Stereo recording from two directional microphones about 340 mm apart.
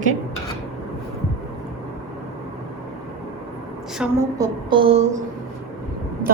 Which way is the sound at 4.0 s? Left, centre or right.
Centre.